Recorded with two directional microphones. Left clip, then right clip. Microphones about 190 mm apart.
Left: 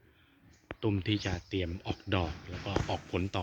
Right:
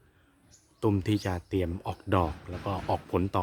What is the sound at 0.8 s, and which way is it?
Speech, 35° right (ahead or behind).